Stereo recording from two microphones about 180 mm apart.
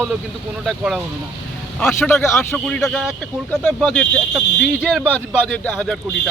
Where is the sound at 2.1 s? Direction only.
15° left (ahead or behind).